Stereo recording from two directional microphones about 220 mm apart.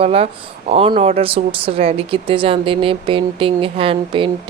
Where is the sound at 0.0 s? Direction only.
25° right (ahead or behind).